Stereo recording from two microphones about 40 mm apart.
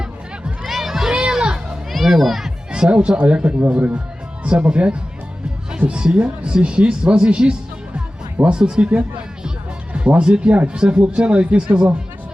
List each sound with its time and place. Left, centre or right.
0.0 s music: right
0.7 s music: centre
1.1 s music: right
1.9 s children playing: centre
2.7 s speech: right